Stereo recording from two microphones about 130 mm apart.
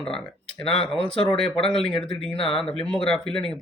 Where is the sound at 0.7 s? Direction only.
45° left (ahead or behind).